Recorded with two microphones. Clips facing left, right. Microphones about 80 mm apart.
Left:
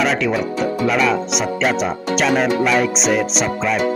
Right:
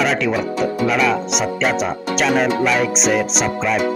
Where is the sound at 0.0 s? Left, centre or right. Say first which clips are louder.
Even; centre.